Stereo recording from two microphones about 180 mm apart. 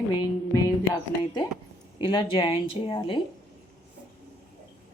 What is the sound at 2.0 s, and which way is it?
Speech, 25° left (ahead or behind).